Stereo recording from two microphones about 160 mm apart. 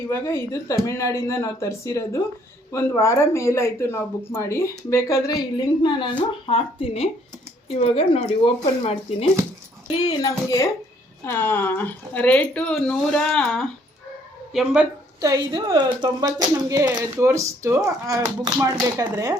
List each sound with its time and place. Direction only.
0.1 s speech: 15° left (ahead or behind); by 9.0 s 40° left (ahead or behind)
9.9 s speech: 25° left (ahead or behind); by 14.8 s 5° right (ahead or behind)
15.2 s speech: 25° right (ahead or behind)